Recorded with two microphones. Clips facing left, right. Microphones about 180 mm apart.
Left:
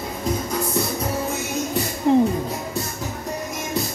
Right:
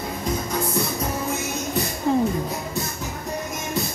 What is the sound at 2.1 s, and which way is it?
Music, 20° left (ahead or behind).